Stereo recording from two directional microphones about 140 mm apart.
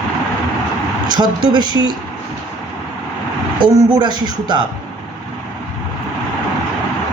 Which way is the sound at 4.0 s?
30° right (ahead or behind).